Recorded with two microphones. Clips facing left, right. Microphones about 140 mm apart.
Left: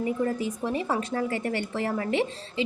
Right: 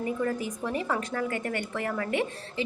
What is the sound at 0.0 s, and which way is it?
A woman's voice, 25° left (ahead or behind).